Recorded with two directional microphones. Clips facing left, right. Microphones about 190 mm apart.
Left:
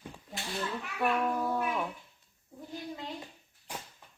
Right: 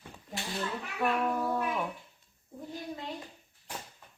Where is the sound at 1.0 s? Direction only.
Centre (ahead or behind).